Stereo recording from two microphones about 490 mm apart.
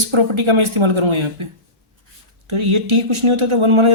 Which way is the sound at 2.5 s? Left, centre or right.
Right.